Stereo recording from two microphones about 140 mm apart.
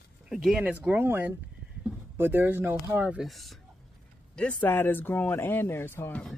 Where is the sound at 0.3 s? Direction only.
5° right (ahead or behind).